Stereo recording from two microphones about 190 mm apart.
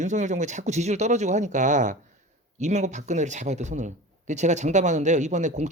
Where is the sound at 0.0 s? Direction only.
40° right (ahead or behind).